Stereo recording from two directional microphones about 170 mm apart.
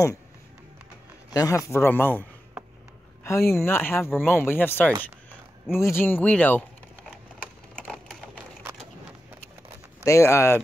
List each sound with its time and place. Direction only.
1.3 s speech: 20° left (ahead or behind)
3.5 s speech: 15° left (ahead or behind)
7.7 s typewriter: centre (ahead or behind)
10.0 s speech: 15° left (ahead or behind)